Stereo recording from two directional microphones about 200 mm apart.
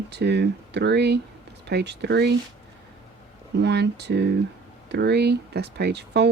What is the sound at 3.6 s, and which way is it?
Speech, 55° right (ahead or behind).